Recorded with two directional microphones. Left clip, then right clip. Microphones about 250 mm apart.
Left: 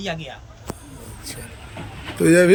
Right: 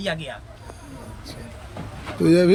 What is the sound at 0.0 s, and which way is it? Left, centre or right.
Speech, centre.